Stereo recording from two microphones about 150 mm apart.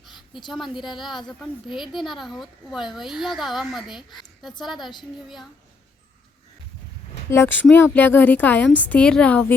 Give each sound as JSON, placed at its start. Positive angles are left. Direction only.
{"t": 0.1, "sound": "a sound", "side_deg": 30}
{"t": 0.5, "sound": "speech", "side_deg": 0}
{"t": 7.3, "sound": "a woman's voice", "side_deg": 15}